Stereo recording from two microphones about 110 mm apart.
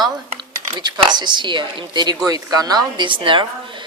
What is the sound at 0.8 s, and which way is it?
A woman's voice, 40° right (ahead or behind).